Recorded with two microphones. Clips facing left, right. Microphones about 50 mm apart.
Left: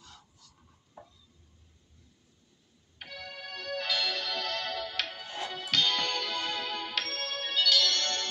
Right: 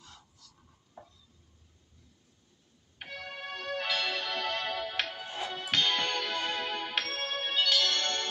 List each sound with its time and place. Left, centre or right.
3.0 s music: right
5.1 s music: centre